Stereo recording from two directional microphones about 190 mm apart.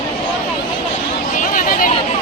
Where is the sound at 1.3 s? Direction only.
45° left (ahead or behind).